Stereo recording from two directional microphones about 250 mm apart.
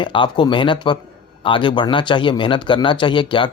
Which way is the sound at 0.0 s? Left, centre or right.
Centre.